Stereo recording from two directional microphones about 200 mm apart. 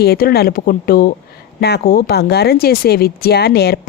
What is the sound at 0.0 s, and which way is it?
A woman's voice, 50° left (ahead or behind).